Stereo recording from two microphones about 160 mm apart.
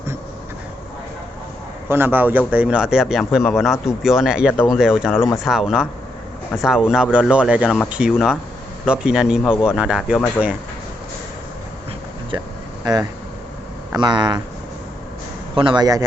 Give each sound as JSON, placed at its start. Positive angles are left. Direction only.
{"t": 1.9, "sound": "a man's voice", "side_deg": -15}
{"t": 12.8, "sound": "speech", "side_deg": -25}
{"t": 15.5, "sound": "speech", "side_deg": -30}